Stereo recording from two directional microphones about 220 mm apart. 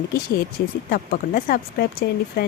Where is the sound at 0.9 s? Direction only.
40° left (ahead or behind).